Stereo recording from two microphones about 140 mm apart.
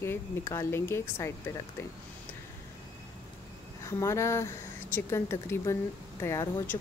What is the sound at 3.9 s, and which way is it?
A woman's voice, 20° left (ahead or behind).